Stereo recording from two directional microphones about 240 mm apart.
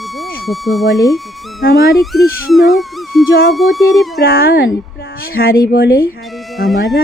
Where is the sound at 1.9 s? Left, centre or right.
Centre.